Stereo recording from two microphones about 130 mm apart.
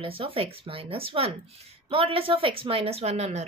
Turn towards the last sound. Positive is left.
turn(degrees=-55)  # may be behind; listen again after turning